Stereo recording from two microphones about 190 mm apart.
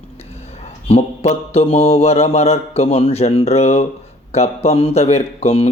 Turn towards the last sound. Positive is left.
turn(degrees=30)  # may be behind; listen again after turning